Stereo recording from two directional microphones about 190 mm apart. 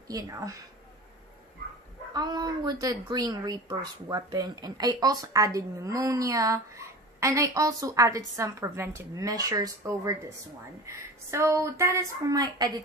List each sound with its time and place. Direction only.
0.1 s speech: 20° right (ahead or behind)
2.1 s speech: 20° right (ahead or behind)